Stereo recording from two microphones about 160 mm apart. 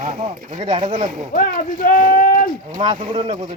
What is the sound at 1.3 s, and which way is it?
Speech, 55° left (ahead or behind).